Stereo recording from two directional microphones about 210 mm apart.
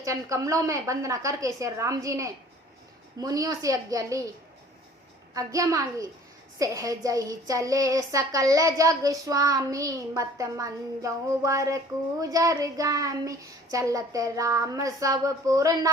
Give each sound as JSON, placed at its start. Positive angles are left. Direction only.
{"t": 0.0, "sound": "a woman's voice", "side_deg": -15}
{"t": 5.3, "sound": "a woman's voice", "side_deg": -15}